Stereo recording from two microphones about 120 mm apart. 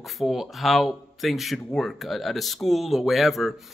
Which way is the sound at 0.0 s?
Centre (ahead or behind).